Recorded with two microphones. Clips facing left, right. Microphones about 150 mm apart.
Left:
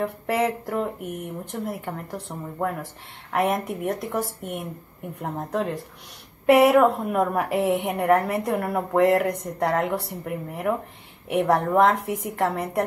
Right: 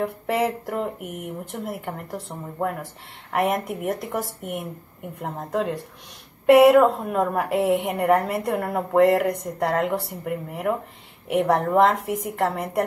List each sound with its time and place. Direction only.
0.0 s speech: centre (ahead or behind)